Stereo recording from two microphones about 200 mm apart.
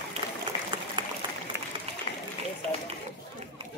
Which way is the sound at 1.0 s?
25° right (ahead or behind).